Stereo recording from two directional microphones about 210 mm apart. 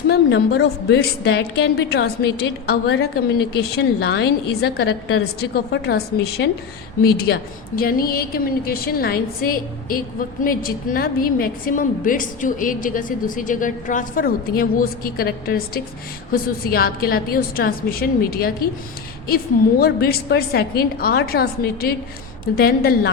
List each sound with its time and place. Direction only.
0.1 s a woman's voice: 55° left (ahead or behind)
19.8 s a woman's voice: 45° left (ahead or behind)